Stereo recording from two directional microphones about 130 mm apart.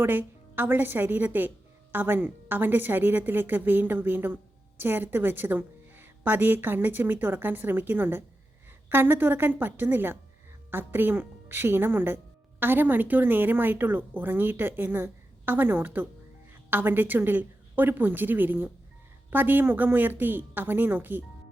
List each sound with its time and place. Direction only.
0.0 s a woman's voice: 15° right (ahead or behind)